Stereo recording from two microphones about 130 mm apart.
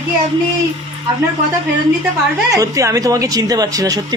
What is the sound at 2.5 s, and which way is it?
A man's voice, 25° right (ahead or behind).